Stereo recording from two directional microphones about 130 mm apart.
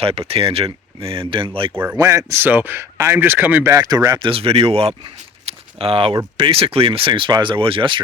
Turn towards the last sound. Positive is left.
turn(degrees=-40)  # may be behind; listen again after turning